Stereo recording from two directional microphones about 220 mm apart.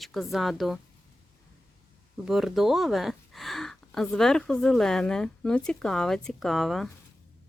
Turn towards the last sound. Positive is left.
turn(degrees=0)  # may be behind; listen again after turning